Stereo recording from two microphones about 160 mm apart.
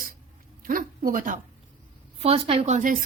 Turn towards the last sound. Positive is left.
turn(degrees=-55)  # may be behind; listen again after turning